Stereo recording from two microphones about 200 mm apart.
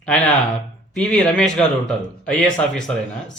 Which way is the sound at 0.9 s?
5° left (ahead or behind).